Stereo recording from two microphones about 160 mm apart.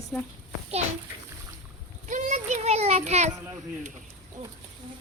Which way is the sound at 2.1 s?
50° right (ahead or behind).